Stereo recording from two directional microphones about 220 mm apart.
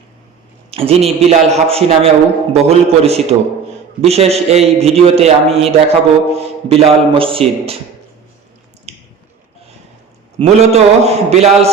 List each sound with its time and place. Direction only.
0.7 s a man's voice: 25° right (ahead or behind)
8.9 s squish: 30° right (ahead or behind)
10.3 s a man's voice: 30° right (ahead or behind)